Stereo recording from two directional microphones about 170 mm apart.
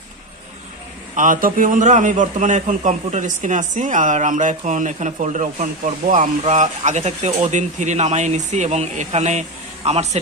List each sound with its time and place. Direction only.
1.1 s a man's voice: 50° right (ahead or behind)